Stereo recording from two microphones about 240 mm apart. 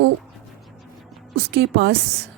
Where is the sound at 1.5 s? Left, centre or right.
Right.